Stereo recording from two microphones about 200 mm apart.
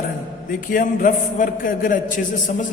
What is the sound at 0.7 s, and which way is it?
A man's voice, 45° left (ahead or behind).